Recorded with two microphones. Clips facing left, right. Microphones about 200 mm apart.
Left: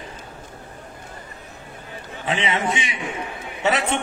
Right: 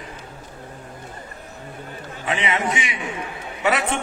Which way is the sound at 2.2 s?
25° left (ahead or behind).